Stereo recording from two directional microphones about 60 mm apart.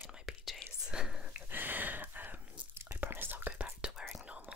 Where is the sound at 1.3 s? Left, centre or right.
Right.